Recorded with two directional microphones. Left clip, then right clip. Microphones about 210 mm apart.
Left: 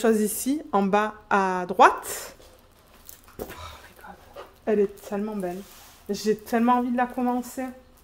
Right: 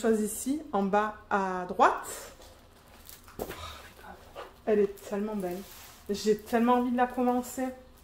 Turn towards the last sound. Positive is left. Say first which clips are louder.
# left 2 dB
turn(degrees=40)  # may be behind; listen again after turning